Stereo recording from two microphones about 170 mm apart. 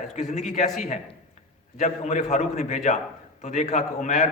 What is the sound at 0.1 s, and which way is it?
Speech, 45° left (ahead or behind).